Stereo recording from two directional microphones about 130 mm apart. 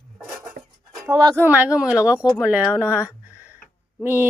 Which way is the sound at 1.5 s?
10° right (ahead or behind).